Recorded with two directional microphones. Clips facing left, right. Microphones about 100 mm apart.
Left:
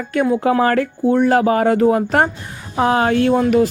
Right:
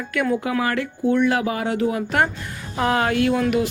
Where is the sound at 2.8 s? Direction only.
25° left (ahead or behind).